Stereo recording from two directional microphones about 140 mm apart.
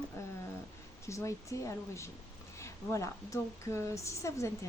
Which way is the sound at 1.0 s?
20° left (ahead or behind).